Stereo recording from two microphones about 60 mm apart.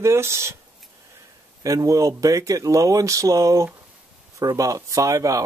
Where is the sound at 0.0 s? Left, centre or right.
Right.